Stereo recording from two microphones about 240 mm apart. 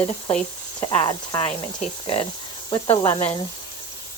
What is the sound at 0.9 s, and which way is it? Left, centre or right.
Speech, left.